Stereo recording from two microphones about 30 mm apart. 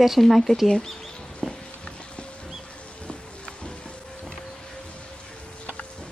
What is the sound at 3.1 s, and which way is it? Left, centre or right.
Music, left.